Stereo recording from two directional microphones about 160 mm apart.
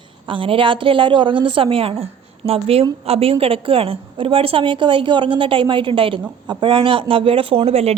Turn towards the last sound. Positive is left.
turn(degrees=-40)  # may be behind; listen again after turning